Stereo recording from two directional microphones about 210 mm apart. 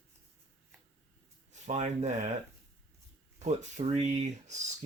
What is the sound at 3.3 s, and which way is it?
Speech, 35° right (ahead or behind).